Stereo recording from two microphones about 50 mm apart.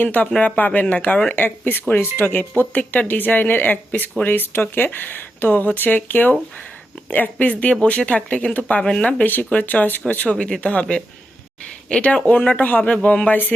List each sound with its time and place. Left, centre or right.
0.0 s speech: left
1.4 s a woman's voice: left
9.2 s speech: left
10.2 s a woman's voice: centre
12.2 s speech: left